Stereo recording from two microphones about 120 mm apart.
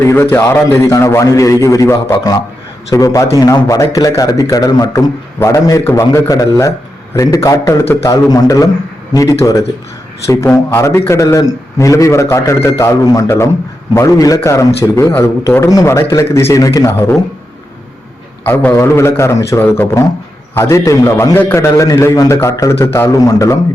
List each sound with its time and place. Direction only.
0.0 s a man's voice: 20° left (ahead or behind)
18.4 s a man's voice: 15° left (ahead or behind)